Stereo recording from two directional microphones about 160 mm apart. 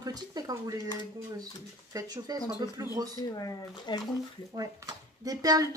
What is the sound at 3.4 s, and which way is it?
Speech, 25° left (ahead or behind).